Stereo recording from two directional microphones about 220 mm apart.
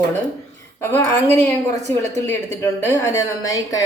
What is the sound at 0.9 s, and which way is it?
A woman's voice, 10° left (ahead or behind).